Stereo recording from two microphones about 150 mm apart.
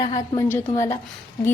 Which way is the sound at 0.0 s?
25° left (ahead or behind).